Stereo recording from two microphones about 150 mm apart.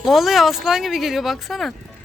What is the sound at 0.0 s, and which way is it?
Speech, centre (ahead or behind).